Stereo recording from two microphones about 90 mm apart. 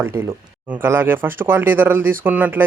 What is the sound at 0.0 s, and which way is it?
A man's voice, 30° right (ahead or behind).